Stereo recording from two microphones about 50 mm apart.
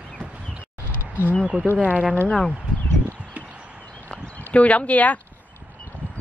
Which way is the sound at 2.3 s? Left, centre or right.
Centre.